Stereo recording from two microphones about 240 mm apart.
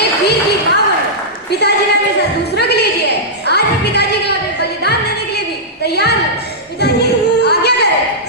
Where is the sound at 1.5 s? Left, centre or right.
Left.